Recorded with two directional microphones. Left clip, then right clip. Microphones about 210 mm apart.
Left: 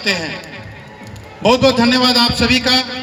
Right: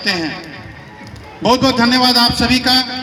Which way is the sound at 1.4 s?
45° left (ahead or behind).